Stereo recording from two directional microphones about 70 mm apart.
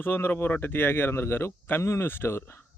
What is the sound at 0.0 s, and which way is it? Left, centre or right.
Speech, left.